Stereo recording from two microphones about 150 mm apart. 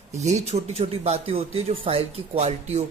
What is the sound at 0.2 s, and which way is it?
Speech, 50° right (ahead or behind).